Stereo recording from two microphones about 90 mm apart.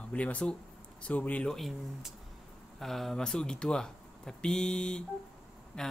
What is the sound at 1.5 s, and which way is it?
Speech, centre (ahead or behind).